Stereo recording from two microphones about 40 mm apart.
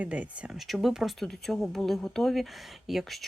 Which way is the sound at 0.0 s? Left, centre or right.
Right.